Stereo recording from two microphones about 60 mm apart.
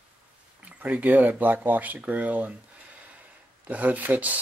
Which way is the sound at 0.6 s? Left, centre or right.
Right.